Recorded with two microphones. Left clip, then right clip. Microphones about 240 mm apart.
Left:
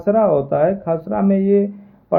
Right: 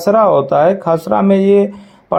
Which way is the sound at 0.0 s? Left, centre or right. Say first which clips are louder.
Right 5 dB; right.